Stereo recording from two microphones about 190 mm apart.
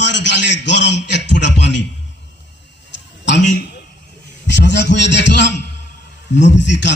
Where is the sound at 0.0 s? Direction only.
65° left (ahead or behind).